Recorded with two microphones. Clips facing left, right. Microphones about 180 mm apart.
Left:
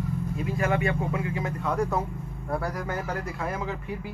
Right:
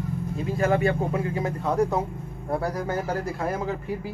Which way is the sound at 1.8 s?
20° right (ahead or behind).